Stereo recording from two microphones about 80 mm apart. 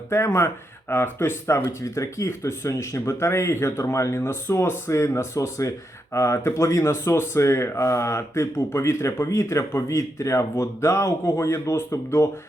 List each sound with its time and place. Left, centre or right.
0.3 s speech: left